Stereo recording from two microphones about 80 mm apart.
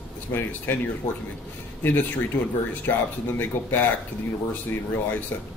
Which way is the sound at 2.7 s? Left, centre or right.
Left.